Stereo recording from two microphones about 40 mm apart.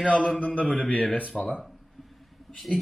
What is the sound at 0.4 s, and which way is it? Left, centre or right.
Speech, left.